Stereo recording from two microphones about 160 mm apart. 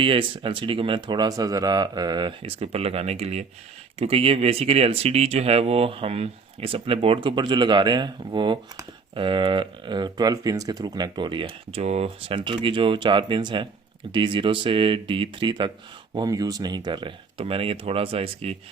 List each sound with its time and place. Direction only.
0.0 s speech: 35° right (ahead or behind)